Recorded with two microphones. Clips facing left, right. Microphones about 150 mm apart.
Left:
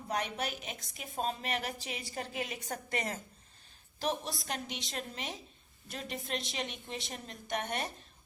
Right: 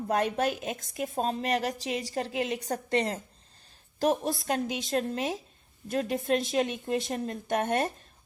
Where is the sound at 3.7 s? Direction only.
40° right (ahead or behind).